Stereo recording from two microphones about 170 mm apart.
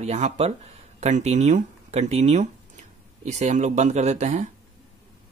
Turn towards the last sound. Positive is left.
turn(degrees=-45)  # may be behind; listen again after turning